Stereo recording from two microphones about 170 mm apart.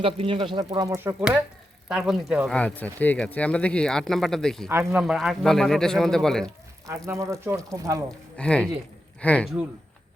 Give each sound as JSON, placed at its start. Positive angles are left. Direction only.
{"t": 0.0, "sound": "speech", "side_deg": -30}
{"t": 1.9, "sound": "speech", "side_deg": 0}
{"t": 4.7, "sound": "speech", "side_deg": -15}
{"t": 5.0, "sound": "speech", "side_deg": 0}
{"t": 6.8, "sound": "speech", "side_deg": -20}
{"t": 8.4, "sound": "speech", "side_deg": 5}